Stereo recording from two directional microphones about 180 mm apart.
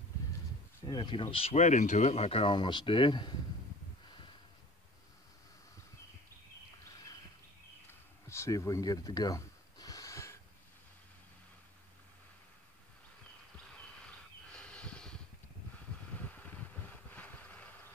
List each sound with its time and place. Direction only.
0.7 s speech: 25° left (ahead or behind)
8.3 s gasp: 15° left (ahead or behind)
13.7 s a sound: 5° left (ahead or behind)
16.2 s vehicle: 10° left (ahead or behind)